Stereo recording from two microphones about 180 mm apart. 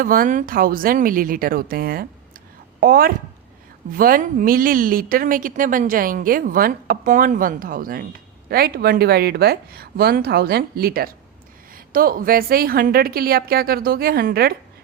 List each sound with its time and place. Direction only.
0.0 s a woman's voice: 50° right (ahead or behind)